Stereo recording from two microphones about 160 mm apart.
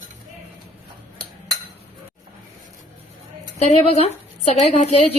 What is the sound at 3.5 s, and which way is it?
A woman's voice, 40° left (ahead or behind).